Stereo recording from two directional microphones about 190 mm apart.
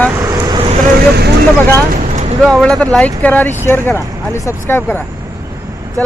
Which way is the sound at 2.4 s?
Centre (ahead or behind).